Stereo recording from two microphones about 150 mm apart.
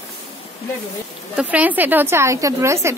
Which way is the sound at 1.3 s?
10° right (ahead or behind).